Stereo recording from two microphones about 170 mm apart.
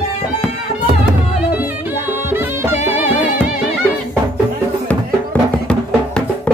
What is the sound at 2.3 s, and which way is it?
Music, 15° right (ahead or behind).